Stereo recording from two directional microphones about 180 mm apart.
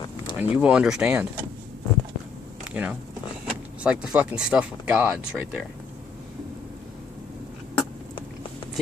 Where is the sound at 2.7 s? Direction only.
10° right (ahead or behind).